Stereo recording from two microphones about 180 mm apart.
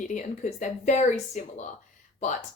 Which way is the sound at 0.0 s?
45° left (ahead or behind).